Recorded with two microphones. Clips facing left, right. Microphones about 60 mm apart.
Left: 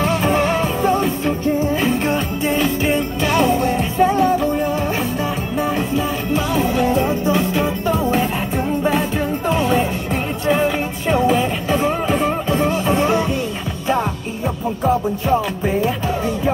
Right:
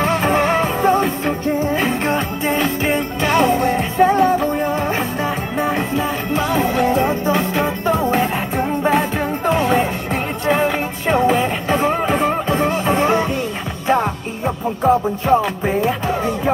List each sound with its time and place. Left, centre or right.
0.0 s music: right